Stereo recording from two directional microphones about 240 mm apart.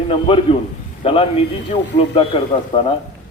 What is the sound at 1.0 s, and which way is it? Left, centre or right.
A man's voice, left.